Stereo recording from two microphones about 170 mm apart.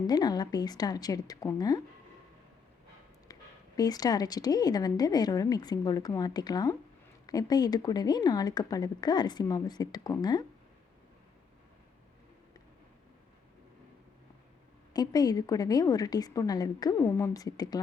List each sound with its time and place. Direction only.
0.1 s a woman's voice: 25° left (ahead or behind)
3.3 s a sound: 20° left (ahead or behind)
3.8 s a woman's voice: 20° left (ahead or behind)
14.9 s a woman's voice: 20° left (ahead or behind)